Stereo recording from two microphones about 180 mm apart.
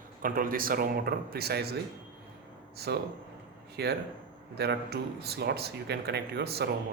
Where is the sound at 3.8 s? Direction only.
65° right (ahead or behind).